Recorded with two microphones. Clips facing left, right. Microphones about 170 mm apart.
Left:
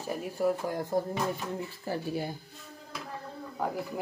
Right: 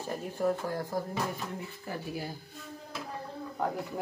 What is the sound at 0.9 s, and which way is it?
A woman's voice, 25° left (ahead or behind).